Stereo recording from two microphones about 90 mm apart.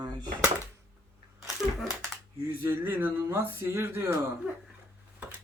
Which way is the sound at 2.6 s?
25° right (ahead or behind).